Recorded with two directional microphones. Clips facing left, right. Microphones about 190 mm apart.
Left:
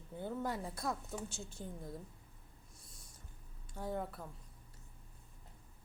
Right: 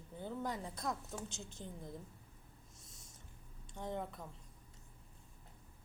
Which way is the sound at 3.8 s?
5° left (ahead or behind).